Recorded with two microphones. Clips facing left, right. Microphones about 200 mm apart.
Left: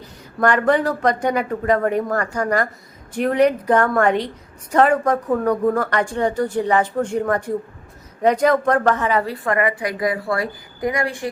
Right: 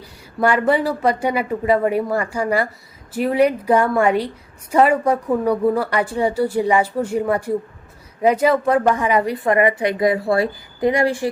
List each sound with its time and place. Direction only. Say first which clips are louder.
0.0 s a woman's voice: even; 10° right (ahead or behind); by 11.3 s 30° right (ahead or behind)